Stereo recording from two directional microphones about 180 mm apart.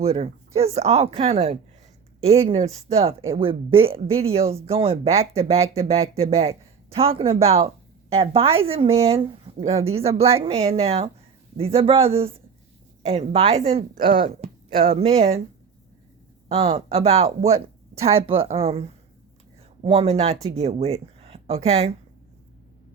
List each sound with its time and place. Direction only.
0.0 s speech: 35° right (ahead or behind)
16.5 s speech: 35° right (ahead or behind)